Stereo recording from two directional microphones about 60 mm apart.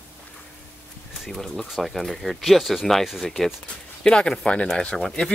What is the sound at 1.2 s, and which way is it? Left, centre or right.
Speech, centre.